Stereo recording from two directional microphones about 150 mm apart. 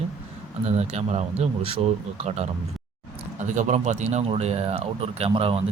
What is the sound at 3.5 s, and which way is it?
Speech, 50° right (ahead or behind).